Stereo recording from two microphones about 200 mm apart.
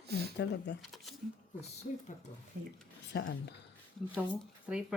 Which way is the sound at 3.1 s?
60° left (ahead or behind).